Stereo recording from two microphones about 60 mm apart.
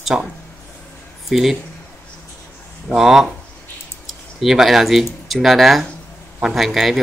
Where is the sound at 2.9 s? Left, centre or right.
Centre.